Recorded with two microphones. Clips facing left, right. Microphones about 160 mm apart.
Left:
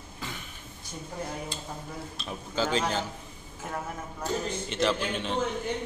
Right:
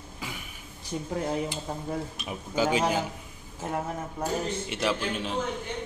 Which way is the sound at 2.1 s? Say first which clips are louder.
Left 1 dB; 10° right (ahead or behind).